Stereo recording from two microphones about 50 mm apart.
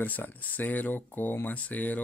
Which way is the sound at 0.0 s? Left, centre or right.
Left.